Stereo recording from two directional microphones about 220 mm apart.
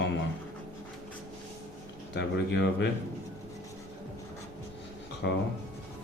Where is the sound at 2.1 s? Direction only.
50° left (ahead or behind).